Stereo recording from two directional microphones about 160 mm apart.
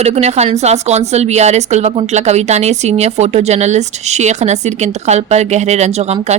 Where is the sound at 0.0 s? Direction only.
45° right (ahead or behind).